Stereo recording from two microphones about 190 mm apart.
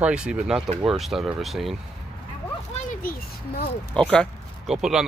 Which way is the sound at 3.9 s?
5° left (ahead or behind).